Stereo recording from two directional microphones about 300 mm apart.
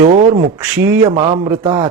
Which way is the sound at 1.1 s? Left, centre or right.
Centre.